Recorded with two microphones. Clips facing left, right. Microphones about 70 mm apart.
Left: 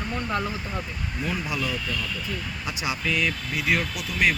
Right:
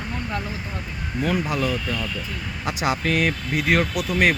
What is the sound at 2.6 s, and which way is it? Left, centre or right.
Speech, right.